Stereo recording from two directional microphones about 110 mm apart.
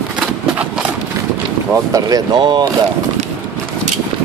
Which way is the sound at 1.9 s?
35° right (ahead or behind).